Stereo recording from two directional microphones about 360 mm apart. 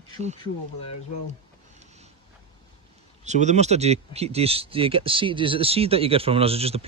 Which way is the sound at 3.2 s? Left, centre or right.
Centre.